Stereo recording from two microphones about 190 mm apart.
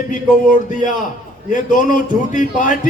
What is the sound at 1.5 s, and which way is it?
A man's voice, 45° left (ahead or behind).